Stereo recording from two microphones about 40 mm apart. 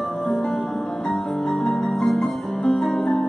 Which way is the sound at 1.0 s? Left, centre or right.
Centre.